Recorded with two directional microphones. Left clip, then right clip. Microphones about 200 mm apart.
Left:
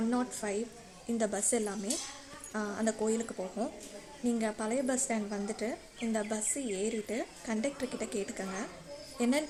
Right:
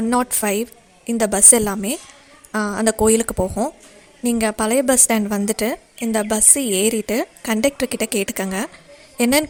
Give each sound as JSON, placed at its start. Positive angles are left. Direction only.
{"t": 0.1, "sound": "a woman's voice", "side_deg": -50}